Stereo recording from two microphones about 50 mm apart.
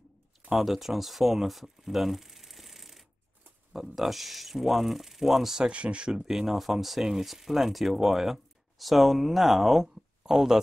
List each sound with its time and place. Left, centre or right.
0.5 s speech: centre
5.7 s speech: right
6.1 s speech: centre